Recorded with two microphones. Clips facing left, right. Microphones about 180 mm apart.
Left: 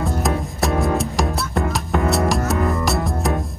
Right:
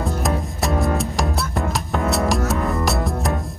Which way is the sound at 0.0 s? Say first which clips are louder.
Left 1 dB; centre (ahead or behind).